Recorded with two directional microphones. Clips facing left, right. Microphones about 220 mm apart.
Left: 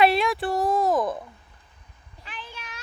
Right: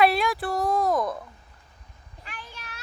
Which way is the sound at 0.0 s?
Centre (ahead or behind).